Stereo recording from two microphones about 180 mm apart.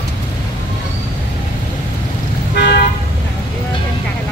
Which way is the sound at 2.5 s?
75° left (ahead or behind).